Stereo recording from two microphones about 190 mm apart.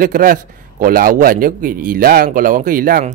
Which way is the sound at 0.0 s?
45° right (ahead or behind).